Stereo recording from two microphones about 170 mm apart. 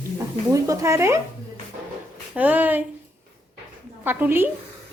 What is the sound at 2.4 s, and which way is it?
Speech, 10° right (ahead or behind).